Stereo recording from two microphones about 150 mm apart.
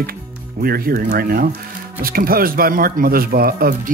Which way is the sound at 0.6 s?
85° right.